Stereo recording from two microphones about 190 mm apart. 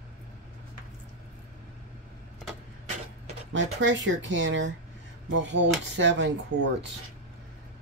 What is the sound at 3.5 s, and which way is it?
Speech, 75° right (ahead or behind).